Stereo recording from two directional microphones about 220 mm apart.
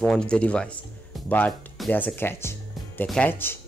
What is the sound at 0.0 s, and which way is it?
Speech, 5° left (ahead or behind).